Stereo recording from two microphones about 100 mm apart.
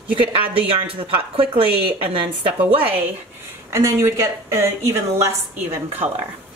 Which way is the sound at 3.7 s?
30° right (ahead or behind).